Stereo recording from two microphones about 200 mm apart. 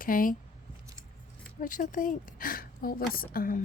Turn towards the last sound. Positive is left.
turn(degrees=45)  # may be behind; listen again after turning